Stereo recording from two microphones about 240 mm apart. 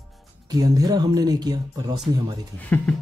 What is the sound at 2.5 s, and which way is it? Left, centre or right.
Speech, centre.